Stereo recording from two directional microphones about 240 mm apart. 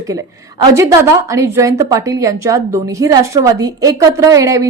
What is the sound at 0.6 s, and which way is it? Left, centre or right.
A woman's voice, centre.